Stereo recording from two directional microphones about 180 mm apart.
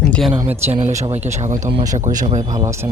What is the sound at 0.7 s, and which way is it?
Speech, 40° right (ahead or behind).